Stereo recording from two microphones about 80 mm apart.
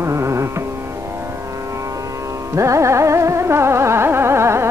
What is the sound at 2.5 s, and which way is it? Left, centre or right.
Music, right.